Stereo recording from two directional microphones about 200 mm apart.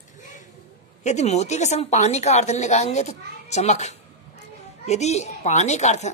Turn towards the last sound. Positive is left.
turn(degrees=35)  # may be behind; listen again after turning